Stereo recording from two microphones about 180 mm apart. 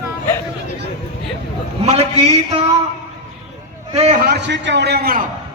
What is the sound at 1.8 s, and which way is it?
Speech, 35° right (ahead or behind).